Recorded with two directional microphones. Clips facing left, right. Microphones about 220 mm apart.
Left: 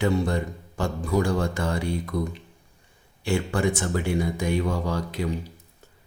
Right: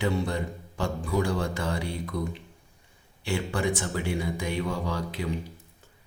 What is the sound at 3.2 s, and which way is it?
Speech, 45° left (ahead or behind).